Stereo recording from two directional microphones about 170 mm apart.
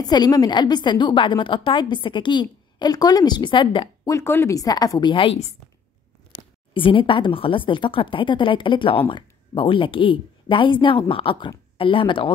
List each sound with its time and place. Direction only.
0.0 s a woman's voice: 25° left (ahead or behind)
6.7 s a woman's voice: 30° left (ahead or behind)